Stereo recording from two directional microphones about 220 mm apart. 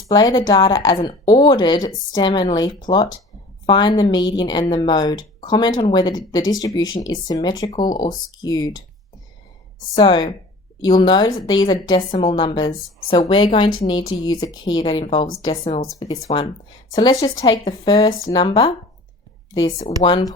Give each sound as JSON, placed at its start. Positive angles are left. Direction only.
{"t": 0.1, "sound": "a woman's voice", "side_deg": 20}
{"t": 9.9, "sound": "a woman's voice", "side_deg": 20}